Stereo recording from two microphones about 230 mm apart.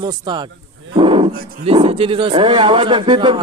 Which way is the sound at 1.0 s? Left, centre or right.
Right.